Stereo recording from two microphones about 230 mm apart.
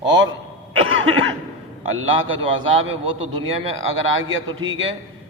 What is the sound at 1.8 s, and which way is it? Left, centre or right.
A man's voice, right.